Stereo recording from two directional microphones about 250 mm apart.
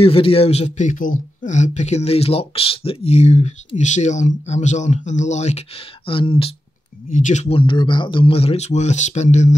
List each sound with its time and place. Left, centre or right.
0.0 s a man's voice: left